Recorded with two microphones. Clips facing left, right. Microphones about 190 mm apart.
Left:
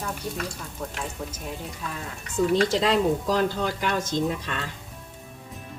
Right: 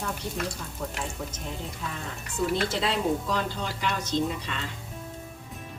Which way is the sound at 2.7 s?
40° left (ahead or behind).